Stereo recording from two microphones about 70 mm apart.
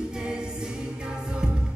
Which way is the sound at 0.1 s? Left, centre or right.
Centre.